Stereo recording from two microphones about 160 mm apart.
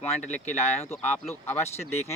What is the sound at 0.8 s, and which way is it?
Speech, 15° left (ahead or behind).